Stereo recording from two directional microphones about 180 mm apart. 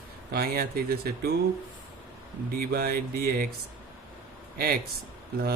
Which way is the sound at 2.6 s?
60° right (ahead or behind).